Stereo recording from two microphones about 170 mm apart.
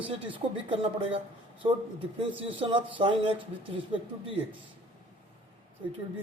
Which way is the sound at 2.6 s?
30° right (ahead or behind).